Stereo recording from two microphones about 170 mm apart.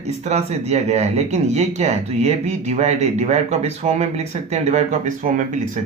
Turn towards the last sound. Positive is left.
turn(degrees=-45)  # may be behind; listen again after turning